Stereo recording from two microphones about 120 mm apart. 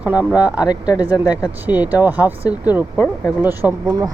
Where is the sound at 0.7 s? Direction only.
35° left (ahead or behind).